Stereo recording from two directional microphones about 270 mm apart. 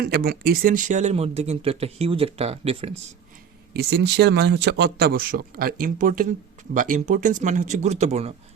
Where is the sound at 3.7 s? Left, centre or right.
Right.